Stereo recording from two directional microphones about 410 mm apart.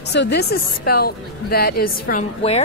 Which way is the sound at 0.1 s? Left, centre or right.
Left.